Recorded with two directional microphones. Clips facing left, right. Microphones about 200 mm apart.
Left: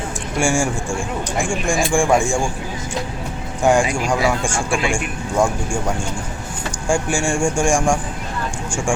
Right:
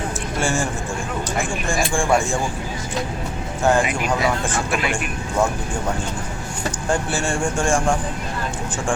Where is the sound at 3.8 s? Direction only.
30° left (ahead or behind).